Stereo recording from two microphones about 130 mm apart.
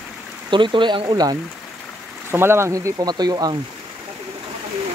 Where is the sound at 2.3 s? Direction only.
20° right (ahead or behind).